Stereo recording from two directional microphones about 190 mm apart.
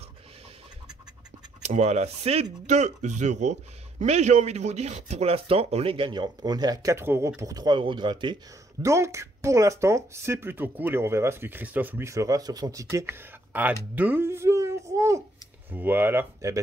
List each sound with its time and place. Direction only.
1.6 s speech: 35° right (ahead or behind); by 13.7 s 10° right (ahead or behind)
13.9 s a sound: 10° right (ahead or behind)
15.7 s speech: 10° right (ahead or behind)